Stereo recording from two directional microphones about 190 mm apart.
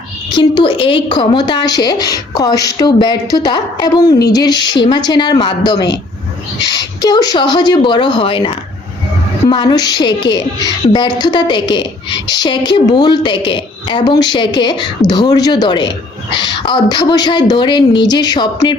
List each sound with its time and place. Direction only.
0.3 s a woman's voice: 25° left (ahead or behind)